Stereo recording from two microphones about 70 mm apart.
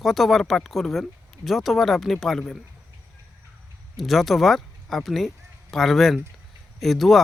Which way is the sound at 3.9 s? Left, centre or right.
Centre.